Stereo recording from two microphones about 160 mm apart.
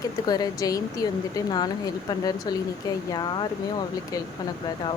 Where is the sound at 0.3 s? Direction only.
25° left (ahead or behind).